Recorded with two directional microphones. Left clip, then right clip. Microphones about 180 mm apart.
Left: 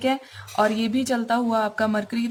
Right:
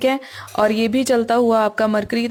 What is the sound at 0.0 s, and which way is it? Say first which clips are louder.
Speech: right 5 dB; 40° right (ahead or behind).